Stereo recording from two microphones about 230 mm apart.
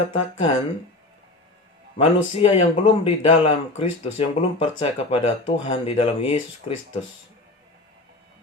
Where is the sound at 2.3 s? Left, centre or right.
Left.